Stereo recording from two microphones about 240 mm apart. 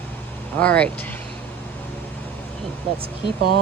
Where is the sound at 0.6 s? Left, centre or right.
Centre.